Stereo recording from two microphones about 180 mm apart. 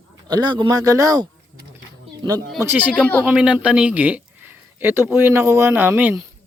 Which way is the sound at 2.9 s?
5° left (ahead or behind).